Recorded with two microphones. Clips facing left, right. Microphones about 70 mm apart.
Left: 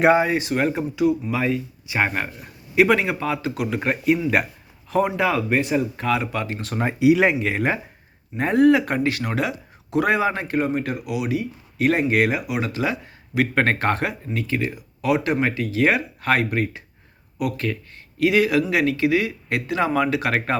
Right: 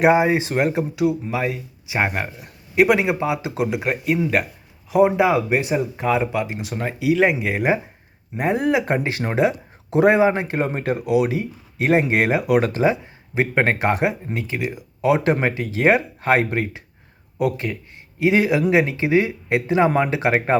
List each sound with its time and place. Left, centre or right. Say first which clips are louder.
0.2 s speech: right 2 dB; right
3.8 s speech: left 1 dB; centre
5.0 s speech: right 4 dB; centre
6.7 s speech: left 4 dB; centre
7.3 s speech: right 2 dB; centre; by 12.5 s right
12.5 s speech: right 8 dB; right
12.8 s speech: right 6 dB; right